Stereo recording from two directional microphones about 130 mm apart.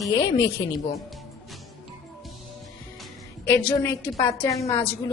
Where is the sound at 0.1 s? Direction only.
30° left (ahead or behind).